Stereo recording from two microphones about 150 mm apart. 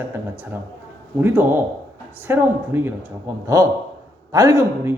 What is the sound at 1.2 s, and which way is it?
A man's voice, 15° right (ahead or behind).